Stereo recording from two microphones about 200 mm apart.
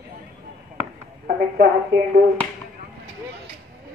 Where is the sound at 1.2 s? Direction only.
50° right (ahead or behind).